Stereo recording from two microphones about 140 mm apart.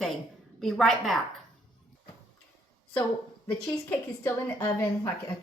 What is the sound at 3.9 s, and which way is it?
Speech, 20° left (ahead or behind).